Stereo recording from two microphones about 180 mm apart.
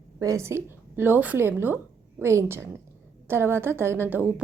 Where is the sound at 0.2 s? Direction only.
15° right (ahead or behind).